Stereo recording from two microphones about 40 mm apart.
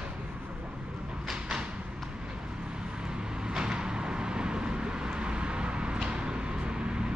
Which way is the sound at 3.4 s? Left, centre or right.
Right.